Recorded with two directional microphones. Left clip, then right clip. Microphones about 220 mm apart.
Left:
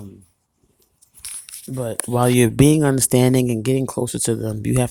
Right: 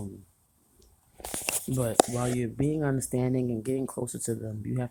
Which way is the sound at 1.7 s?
15° left (ahead or behind).